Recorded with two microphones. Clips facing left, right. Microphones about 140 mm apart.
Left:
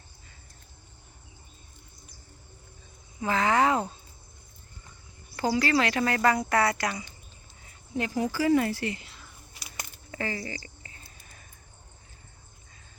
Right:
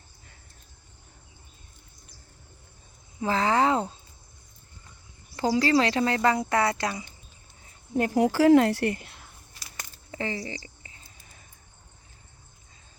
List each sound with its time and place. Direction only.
3.2 s speech: 30° right (ahead or behind)
5.4 s speech: 30° right (ahead or behind)
7.9 s speech: 50° right (ahead or behind)
8.2 s speech: 70° right (ahead or behind); by 9.3 s 55° right (ahead or behind)
10.1 s a sound: 25° right (ahead or behind)